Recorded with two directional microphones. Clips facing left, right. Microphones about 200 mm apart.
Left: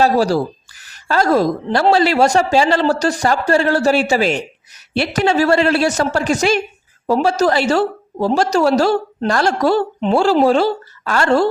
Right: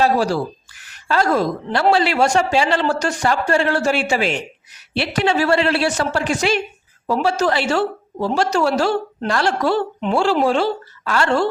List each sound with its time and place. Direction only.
0.0 s a woman's voice: 40° left (ahead or behind)